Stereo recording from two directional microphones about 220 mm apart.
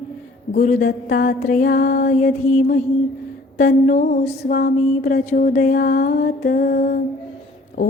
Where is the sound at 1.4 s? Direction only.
35° left (ahead or behind).